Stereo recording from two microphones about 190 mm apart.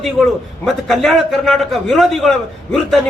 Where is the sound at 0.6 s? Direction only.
Centre (ahead or behind).